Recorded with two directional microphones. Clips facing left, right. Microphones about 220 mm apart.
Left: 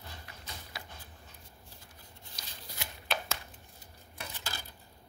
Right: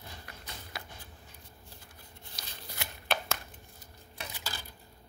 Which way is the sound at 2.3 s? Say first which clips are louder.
Right 2 dB; 60° right (ahead or behind).